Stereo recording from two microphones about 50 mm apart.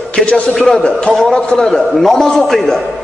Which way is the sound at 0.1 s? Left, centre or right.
Left.